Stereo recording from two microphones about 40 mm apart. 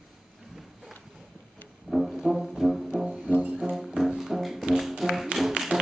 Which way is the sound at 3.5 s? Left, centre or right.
Centre.